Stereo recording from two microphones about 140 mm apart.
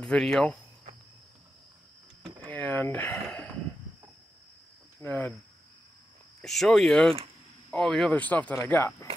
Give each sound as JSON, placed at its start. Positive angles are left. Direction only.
{"t": 0.0, "sound": "speech", "side_deg": 5}
{"t": 2.4, "sound": "a sound", "side_deg": 10}
{"t": 5.0, "sound": "speech", "side_deg": 10}
{"t": 6.4, "sound": "speech", "side_deg": 0}